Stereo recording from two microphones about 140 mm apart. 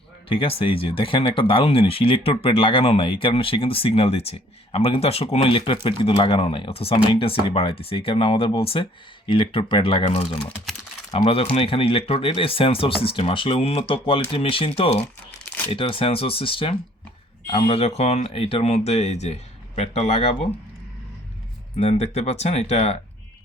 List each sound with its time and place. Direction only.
0.3 s speech: 40° left (ahead or behind)
15.4 s crumpling: 10° left (ahead or behind)
15.7 s speech: 40° left (ahead or behind)
21.8 s speech: 45° left (ahead or behind)